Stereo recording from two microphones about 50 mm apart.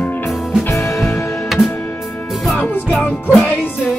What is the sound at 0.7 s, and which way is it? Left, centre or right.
Music, left.